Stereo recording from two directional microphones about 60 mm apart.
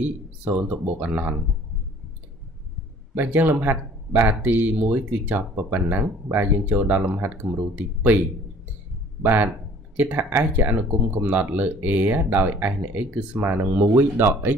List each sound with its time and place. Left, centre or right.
0.5 s speech: right
3.3 s speech: right
9.9 s speech: right